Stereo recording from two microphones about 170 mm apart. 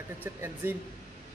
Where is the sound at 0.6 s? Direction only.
10° right (ahead or behind).